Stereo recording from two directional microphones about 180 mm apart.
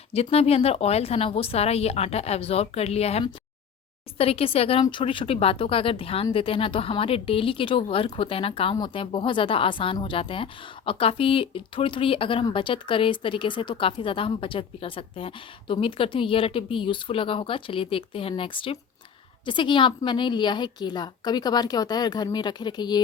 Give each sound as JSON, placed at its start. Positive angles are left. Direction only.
{"t": 0.1, "sound": "speech", "side_deg": 35}